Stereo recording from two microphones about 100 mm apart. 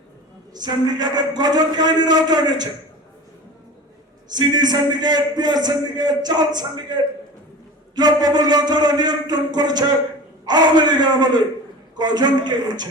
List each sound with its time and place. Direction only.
0.5 s a man's voice: 45° right (ahead or behind)
4.3 s a man's voice: 45° right (ahead or behind)